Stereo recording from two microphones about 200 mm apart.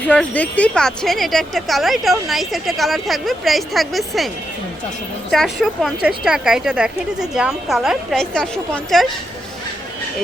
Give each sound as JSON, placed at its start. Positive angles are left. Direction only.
{"t": 0.1, "sound": "speech", "side_deg": 5}
{"t": 5.3, "sound": "speech", "side_deg": 0}